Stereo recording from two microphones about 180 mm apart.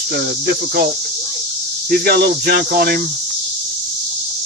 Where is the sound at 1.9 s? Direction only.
55° right (ahead or behind).